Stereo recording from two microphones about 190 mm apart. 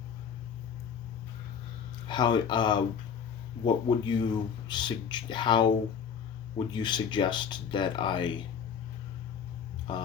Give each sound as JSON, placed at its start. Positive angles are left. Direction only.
{"t": 2.0, "sound": "speech", "side_deg": 25}
{"t": 9.9, "sound": "speech", "side_deg": 25}